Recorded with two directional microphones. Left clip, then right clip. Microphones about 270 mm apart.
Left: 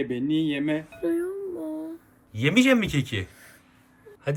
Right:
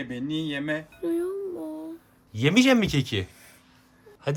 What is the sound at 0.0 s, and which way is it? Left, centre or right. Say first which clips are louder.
Speech: left 5 dB; right.